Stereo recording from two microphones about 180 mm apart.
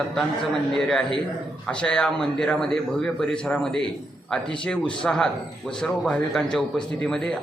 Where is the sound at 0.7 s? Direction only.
5° left (ahead or behind).